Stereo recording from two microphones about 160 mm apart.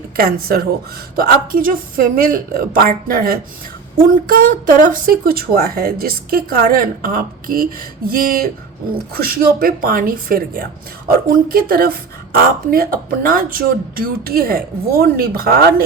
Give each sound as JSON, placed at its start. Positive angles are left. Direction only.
{"t": 0.2, "sound": "speech", "side_deg": -70}